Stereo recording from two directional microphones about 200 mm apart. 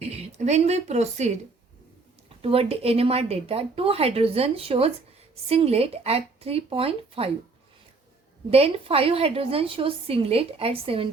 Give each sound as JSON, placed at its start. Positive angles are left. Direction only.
{"t": 0.0, "sound": "speech", "side_deg": -35}
{"t": 2.4, "sound": "a woman's voice", "side_deg": -30}
{"t": 8.4, "sound": "a woman's voice", "side_deg": -30}